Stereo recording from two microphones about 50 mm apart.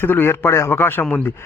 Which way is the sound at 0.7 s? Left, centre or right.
Left.